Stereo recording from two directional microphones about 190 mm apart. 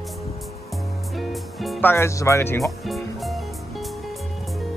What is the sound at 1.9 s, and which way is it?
Speech, 15° left (ahead or behind).